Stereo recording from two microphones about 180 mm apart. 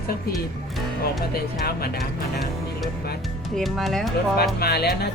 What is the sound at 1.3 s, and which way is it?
Speech, 60° left (ahead or behind).